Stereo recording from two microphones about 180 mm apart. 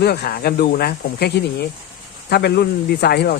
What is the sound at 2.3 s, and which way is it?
Speech, 65° left (ahead or behind).